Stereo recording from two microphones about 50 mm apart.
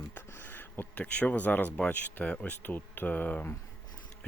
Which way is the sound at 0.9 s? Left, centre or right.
Left.